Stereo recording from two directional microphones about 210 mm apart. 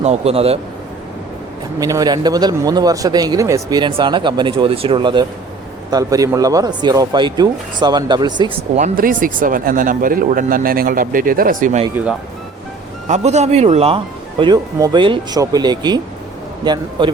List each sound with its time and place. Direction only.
0.0 s a man's voice: 30° right (ahead or behind)
1.8 s a man's voice: 15° right (ahead or behind)
8.8 s speech: 40° right (ahead or behind)
13.1 s a man's voice: 35° right (ahead or behind)